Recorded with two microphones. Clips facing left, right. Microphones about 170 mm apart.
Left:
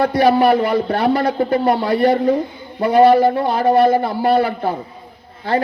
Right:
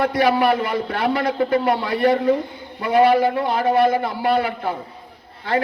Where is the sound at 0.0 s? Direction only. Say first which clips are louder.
Left 4 dB; 30° left (ahead or behind).